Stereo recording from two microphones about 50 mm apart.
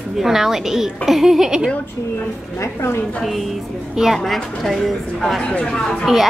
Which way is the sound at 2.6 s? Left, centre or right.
Left.